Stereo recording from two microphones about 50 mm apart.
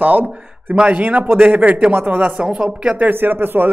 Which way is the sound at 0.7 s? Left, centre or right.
Right.